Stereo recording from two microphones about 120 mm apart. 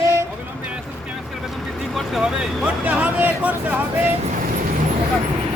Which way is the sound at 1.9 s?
5° right (ahead or behind).